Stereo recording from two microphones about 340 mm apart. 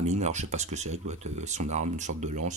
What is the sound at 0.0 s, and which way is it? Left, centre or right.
Speech, centre.